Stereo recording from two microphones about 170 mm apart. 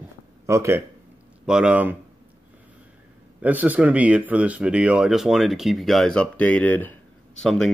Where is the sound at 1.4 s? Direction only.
5° right (ahead or behind).